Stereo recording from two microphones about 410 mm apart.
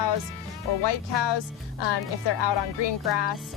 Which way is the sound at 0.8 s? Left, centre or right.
Left.